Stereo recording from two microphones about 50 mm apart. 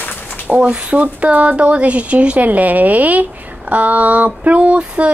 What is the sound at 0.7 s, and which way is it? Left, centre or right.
A woman's voice, right.